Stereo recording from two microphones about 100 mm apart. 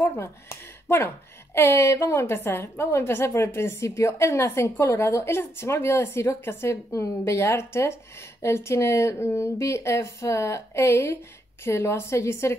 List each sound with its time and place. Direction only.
0.0 s speech: 30° left (ahead or behind)